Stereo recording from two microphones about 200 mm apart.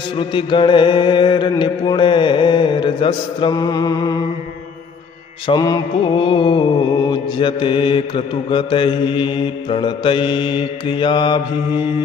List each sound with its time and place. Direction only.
0.2 s music: 25° left (ahead or behind)
5.5 s music: 20° left (ahead or behind)